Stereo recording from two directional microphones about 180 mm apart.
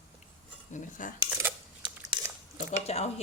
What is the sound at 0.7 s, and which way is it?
Cutlery, 45° left (ahead or behind).